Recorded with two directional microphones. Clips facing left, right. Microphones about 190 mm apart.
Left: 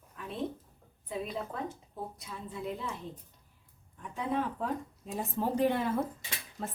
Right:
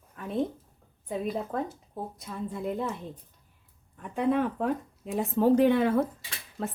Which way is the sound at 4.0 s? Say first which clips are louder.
Right 7 dB; 60° right (ahead or behind).